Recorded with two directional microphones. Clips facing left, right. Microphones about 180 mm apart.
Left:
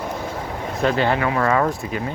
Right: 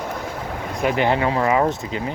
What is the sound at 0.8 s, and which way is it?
Speech, 20° right (ahead or behind).